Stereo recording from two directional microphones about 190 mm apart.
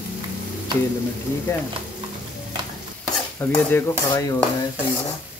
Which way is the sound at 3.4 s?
10° left (ahead or behind).